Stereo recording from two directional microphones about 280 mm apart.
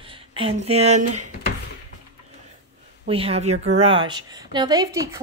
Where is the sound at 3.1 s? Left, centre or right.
Right.